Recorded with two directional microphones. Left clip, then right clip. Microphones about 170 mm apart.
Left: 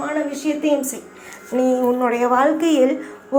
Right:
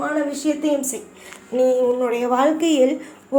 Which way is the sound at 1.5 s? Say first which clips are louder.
Right 1 dB; 20° left (ahead or behind).